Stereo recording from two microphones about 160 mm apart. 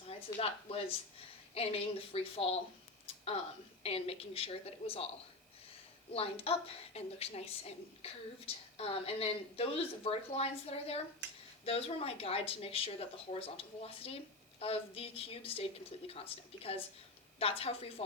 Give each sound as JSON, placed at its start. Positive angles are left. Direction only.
{"t": 0.3, "sound": "speech", "side_deg": 35}
{"t": 3.1, "sound": "a sound", "side_deg": 35}
{"t": 3.8, "sound": "speech", "side_deg": 40}
{"t": 6.1, "sound": "speech", "side_deg": 40}